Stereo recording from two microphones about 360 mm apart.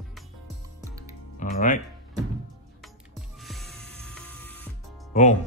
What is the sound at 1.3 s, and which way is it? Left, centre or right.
Speech, left.